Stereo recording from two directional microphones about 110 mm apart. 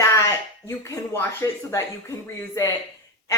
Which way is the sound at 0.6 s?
25° left (ahead or behind).